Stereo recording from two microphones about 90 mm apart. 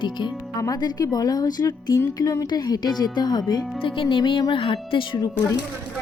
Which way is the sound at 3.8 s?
70° left (ahead or behind).